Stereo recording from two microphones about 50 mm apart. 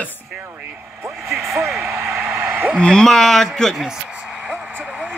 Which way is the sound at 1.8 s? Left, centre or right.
Right.